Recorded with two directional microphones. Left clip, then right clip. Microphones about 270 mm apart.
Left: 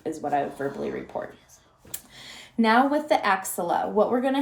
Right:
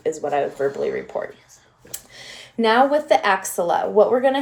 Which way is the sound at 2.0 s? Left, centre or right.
Right.